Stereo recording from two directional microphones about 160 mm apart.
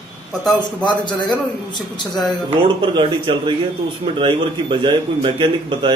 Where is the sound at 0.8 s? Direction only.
30° left (ahead or behind).